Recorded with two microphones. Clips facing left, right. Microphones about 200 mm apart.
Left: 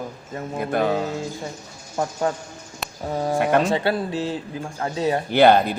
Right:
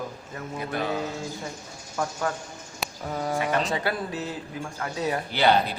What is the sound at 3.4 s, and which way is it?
Speech, 55° left (ahead or behind).